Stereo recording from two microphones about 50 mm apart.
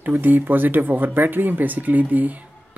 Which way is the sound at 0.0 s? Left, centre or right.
Right.